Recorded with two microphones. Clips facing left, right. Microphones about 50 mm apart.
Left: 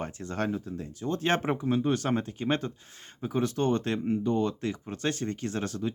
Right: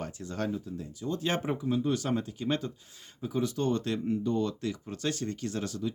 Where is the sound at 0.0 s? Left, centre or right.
Left.